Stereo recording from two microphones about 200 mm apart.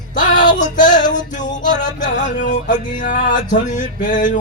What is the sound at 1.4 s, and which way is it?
Music, 40° left (ahead or behind).